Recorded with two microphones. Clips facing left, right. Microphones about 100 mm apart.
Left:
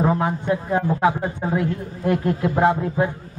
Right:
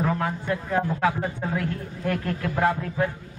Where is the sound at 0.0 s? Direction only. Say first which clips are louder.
Left 5 dB; 20° left (ahead or behind).